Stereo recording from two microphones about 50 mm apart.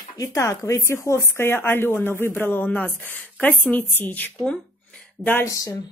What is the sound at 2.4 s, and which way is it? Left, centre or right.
Speech, left.